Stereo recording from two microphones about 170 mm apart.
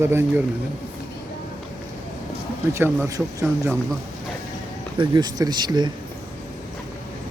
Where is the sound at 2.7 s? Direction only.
15° right (ahead or behind).